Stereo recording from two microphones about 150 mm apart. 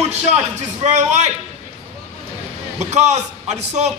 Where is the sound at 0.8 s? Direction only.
50° right (ahead or behind).